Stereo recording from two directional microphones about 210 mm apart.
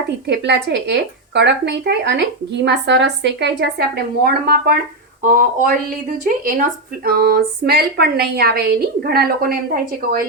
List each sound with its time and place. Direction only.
0.3 s a woman's voice: 55° right (ahead or behind)